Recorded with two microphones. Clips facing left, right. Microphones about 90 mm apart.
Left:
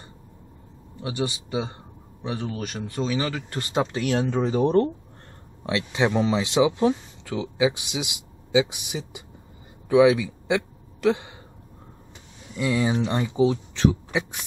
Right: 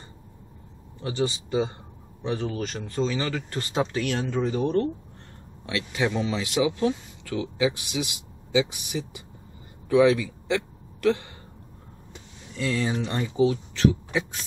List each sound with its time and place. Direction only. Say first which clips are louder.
1.0 s speech: right 1 dB; 10° left (ahead or behind)
4.3 s speech: left 4 dB; 30° left (ahead or behind)
5.7 s a man's voice: left 3 dB; 25° left (ahead or behind)
12.5 s speech: left 3 dB; 15° left (ahead or behind)